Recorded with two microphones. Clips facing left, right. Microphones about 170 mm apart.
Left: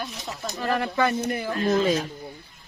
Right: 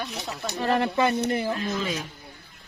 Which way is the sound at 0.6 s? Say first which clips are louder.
Right 1 dB; 25° right (ahead or behind).